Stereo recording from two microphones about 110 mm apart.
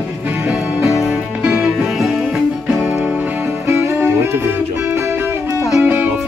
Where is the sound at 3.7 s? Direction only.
25° right (ahead or behind).